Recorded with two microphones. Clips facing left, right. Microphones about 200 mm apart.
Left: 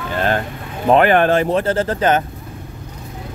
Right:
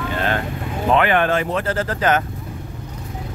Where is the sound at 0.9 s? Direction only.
40° left (ahead or behind); by 2.2 s 20° left (ahead or behind).